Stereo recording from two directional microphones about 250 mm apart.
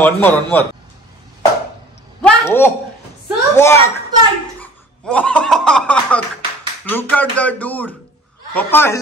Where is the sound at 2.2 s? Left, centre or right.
Centre.